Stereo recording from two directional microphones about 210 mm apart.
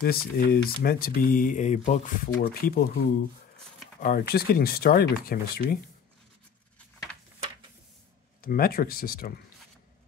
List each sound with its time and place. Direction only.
0.0 s speech: 45° left (ahead or behind)
8.4 s speech: 45° left (ahead or behind)